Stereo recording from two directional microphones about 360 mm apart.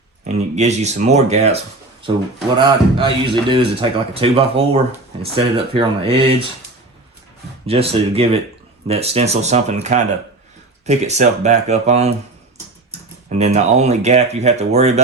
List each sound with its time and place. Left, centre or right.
0.3 s a man's voice: centre
7.7 s a man's voice: centre
13.4 s speech: centre